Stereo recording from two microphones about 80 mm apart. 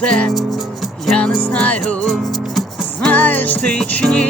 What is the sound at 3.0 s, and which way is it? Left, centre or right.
Music, centre.